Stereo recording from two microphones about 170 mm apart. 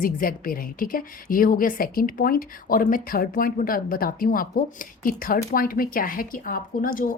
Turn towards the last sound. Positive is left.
turn(degrees=55)  # may be behind; listen again after turning